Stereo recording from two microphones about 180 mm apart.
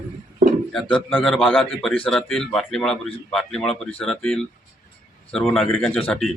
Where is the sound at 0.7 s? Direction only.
Centre (ahead or behind).